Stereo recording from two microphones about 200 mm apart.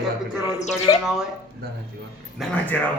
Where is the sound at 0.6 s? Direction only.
35° left (ahead or behind).